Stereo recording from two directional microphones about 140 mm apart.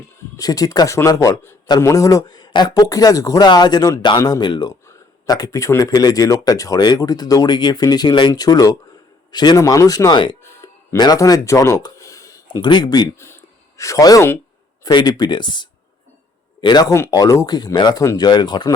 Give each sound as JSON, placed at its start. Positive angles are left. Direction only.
{"t": 0.3, "sound": "speech", "side_deg": 25}
{"t": 10.4, "sound": "a sound", "side_deg": 25}
{"t": 14.8, "sound": "speech", "side_deg": 30}